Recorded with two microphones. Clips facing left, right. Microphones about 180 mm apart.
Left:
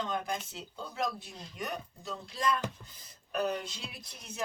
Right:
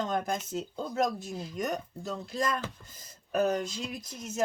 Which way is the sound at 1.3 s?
5° right (ahead or behind).